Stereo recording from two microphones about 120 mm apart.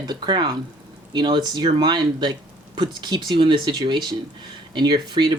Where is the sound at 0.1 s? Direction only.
40° right (ahead or behind).